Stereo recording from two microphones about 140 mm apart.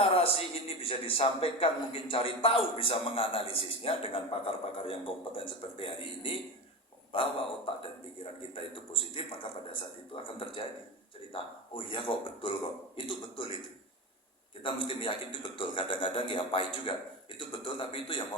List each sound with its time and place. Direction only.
0.0 s a man's voice: 40° left (ahead or behind)
14.6 s a man's voice: 35° left (ahead or behind)